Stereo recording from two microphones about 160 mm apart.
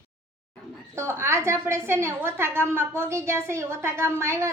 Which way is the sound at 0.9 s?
15° right (ahead or behind).